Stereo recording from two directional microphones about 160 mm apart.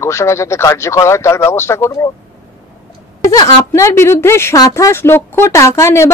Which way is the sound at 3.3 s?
20° left (ahead or behind).